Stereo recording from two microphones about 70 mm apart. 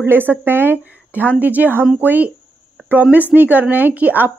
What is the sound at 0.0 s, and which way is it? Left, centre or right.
A woman's voice, right.